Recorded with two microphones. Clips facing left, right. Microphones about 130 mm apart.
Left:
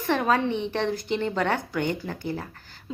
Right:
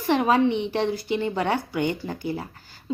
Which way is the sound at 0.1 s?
15° right (ahead or behind).